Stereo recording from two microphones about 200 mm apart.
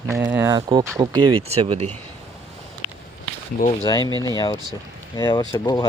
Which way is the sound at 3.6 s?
45° left (ahead or behind).